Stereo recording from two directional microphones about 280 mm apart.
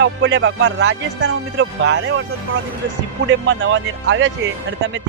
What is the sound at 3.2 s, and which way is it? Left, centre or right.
Speech, right.